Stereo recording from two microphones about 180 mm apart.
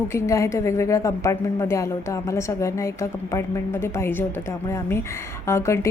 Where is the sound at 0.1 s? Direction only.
15° left (ahead or behind).